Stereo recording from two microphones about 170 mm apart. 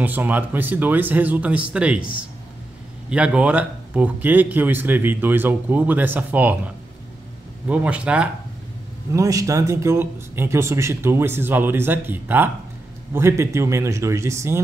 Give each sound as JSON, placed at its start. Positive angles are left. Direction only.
{"t": 0.0, "sound": "speech", "side_deg": -10}
{"t": 7.6, "sound": "speech", "side_deg": -10}
{"t": 9.1, "sound": "speech", "side_deg": -20}